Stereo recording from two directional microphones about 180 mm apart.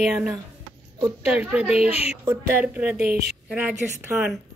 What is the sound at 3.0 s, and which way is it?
Speech, 60° right (ahead or behind).